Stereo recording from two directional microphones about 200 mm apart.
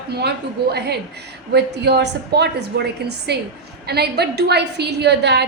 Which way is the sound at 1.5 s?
55° right (ahead or behind).